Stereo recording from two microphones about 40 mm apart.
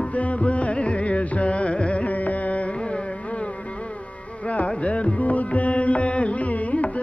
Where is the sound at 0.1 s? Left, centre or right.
Left.